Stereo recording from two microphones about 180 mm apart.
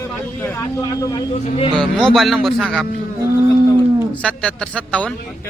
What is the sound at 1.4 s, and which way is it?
Speech, 35° left (ahead or behind).